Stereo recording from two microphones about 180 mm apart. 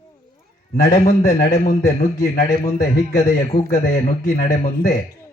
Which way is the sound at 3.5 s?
30° left (ahead or behind).